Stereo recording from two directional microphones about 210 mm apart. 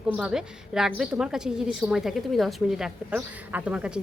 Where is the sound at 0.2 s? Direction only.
5° right (ahead or behind).